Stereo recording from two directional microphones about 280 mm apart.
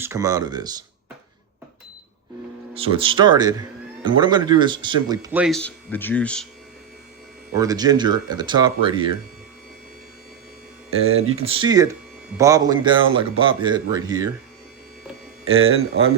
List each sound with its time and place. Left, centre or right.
0.0 s speech: centre
2.7 s speech: centre
7.5 s speech: centre
10.9 s speech: right
11.4 s speech: centre
15.4 s speech: right